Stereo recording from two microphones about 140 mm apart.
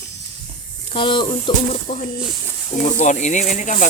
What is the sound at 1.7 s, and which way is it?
Speech, 65° left (ahead or behind).